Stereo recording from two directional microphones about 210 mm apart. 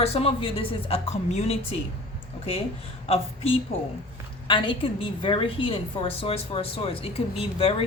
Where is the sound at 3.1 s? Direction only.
30° left (ahead or behind).